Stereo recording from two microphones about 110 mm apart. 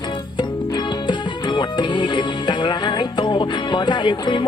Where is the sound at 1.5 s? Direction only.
45° left (ahead or behind).